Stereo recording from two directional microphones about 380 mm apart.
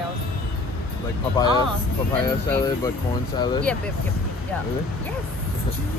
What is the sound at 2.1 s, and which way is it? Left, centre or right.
Speech, centre.